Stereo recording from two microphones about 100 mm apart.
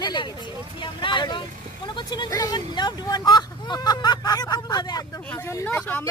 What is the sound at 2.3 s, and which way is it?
Speech, 35° left (ahead or behind).